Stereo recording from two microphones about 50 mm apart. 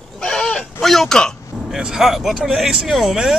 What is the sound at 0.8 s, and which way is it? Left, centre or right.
Speech, centre.